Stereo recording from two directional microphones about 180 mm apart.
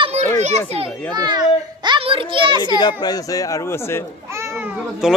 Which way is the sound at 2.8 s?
25° left (ahead or behind).